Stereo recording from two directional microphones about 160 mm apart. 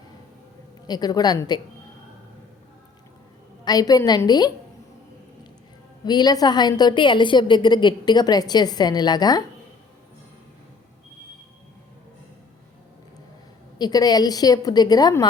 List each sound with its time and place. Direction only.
0.9 s a woman's voice: 25° left (ahead or behind)
3.6 s a woman's voice: 25° left (ahead or behind)
6.1 s a woman's voice: 25° left (ahead or behind)
13.7 s a woman's voice: 25° left (ahead or behind)